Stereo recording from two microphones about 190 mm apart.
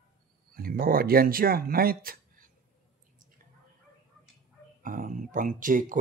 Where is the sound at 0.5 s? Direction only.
50° right (ahead or behind).